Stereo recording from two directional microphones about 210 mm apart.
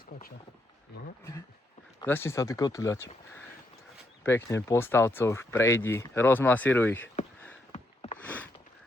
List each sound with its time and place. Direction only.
2.0 s speech: 10° left (ahead or behind)
4.2 s speech: 10° left (ahead or behind)
7.7 s a sound: 30° left (ahead or behind)